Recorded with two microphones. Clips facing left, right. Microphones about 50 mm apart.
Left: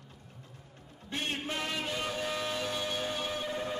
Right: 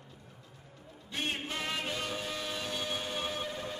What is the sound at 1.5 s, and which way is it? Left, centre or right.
Music, centre.